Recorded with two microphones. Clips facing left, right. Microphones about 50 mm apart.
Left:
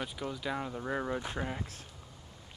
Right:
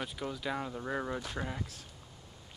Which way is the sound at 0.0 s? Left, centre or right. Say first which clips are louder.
Even; centre.